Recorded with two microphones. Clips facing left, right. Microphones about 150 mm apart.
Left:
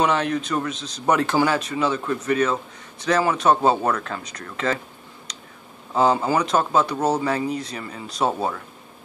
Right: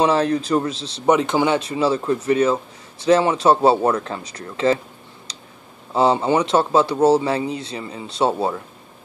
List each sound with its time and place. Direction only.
0.0 s speech: 35° right (ahead or behind)
5.3 s a sound: 30° right (ahead or behind)
5.9 s speech: 30° right (ahead or behind)